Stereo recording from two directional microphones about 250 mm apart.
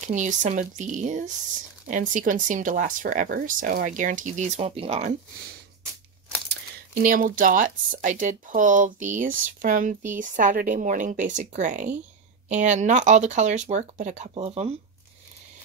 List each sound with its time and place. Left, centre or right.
0.0 s a woman's voice: right
7.0 s a woman's voice: right